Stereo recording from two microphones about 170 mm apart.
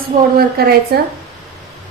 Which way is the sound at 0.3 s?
65° right (ahead or behind).